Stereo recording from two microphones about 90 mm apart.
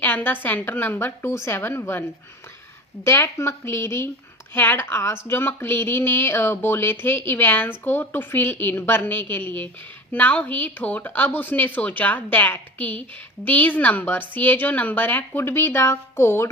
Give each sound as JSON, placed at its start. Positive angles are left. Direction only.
{"t": 0.0, "sound": "a woman's voice", "side_deg": 20}